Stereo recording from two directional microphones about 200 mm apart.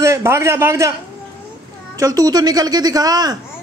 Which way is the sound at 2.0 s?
20° right (ahead or behind).